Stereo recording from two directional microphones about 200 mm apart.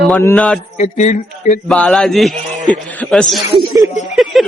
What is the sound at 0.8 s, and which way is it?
Speech, 35° left (ahead or behind).